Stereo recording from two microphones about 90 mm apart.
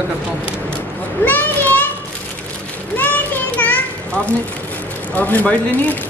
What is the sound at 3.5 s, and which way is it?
Children playing, 20° left (ahead or behind).